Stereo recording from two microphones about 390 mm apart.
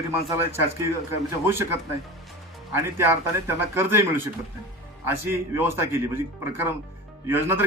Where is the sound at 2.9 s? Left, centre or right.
Centre.